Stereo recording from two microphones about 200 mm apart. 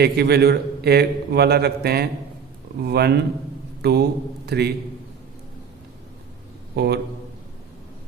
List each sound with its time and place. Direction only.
0.0 s a man's voice: 55° right (ahead or behind)
6.7 s a man's voice: 55° right (ahead or behind)